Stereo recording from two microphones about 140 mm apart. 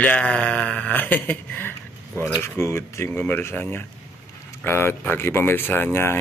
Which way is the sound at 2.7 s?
20° left (ahead or behind).